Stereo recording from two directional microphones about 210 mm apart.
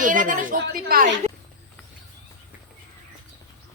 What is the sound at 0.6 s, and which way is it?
Speech, 45° right (ahead or behind).